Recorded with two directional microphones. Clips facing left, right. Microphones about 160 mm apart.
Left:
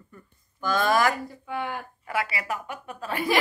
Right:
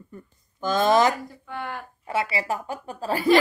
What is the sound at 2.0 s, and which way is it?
A woman's voice, 25° right (ahead or behind).